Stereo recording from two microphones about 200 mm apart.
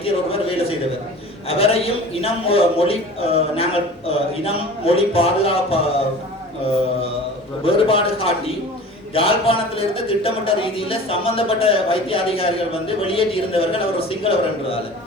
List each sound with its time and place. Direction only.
0.0 s a man's voice: 30° left (ahead or behind)
7.6 s a man's voice: 25° left (ahead or behind)